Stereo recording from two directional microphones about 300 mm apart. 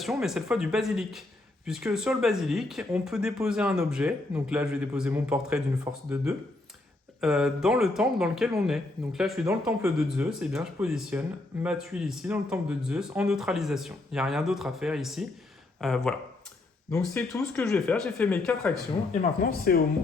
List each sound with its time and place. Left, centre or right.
0.0 s speech: centre
19.4 s speech: left